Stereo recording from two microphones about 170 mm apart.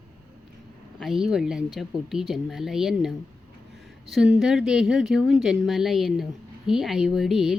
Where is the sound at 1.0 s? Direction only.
Centre (ahead or behind).